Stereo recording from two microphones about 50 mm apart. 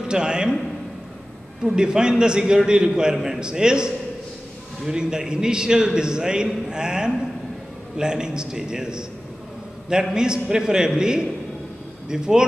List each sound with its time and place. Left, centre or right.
0.0 s a man's voice: centre
1.6 s a man's voice: centre
10.1 s a man's voice: centre